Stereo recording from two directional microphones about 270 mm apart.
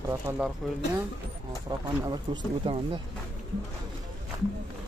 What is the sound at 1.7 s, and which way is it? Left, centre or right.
Speech, centre.